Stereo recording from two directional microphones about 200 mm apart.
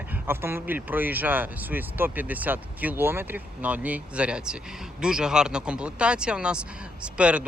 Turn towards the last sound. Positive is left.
turn(degrees=-5)  # may be behind; listen again after turning